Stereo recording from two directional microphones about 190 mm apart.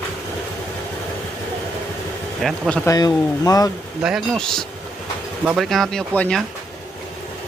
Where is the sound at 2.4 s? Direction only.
5° left (ahead or behind).